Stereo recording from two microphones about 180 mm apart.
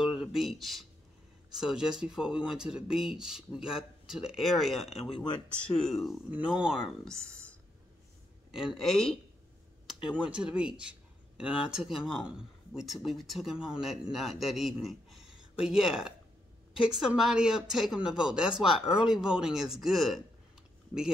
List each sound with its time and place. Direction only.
0.0 s speech: 5° right (ahead or behind)
5.1 s speech: 25° left (ahead or behind)
5.9 s a man's voice: centre (ahead or behind)